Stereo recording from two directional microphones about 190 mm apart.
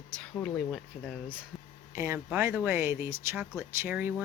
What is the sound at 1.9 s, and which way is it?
Speech, 15° right (ahead or behind).